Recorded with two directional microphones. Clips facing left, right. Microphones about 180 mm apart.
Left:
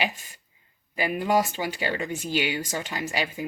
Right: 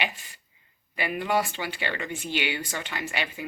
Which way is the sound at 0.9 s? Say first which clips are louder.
Left 3 dB; 40° left (ahead or behind).